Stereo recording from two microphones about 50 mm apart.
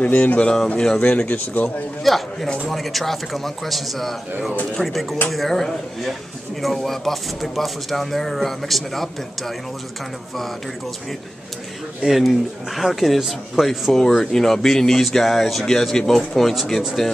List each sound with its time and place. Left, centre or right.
0.0 s speech: left
1.2 s speech: left
2.1 s speech: centre
12.1 s speech: centre